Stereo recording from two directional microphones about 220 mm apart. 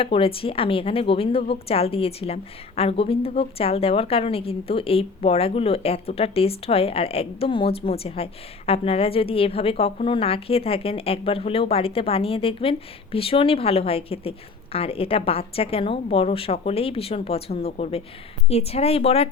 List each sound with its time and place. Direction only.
0.0 s a woman's voice: 25° left (ahead or behind)